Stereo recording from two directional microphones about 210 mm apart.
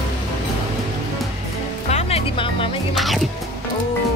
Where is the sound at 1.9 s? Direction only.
30° left (ahead or behind).